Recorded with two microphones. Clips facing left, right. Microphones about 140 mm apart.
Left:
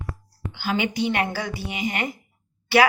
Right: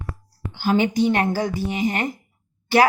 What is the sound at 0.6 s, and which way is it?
A woman's voice, 45° right (ahead or behind).